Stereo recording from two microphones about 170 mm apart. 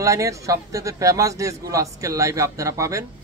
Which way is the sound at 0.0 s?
20° right (ahead or behind).